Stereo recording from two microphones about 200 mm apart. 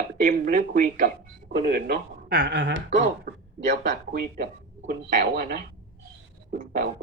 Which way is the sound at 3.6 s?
45° right (ahead or behind).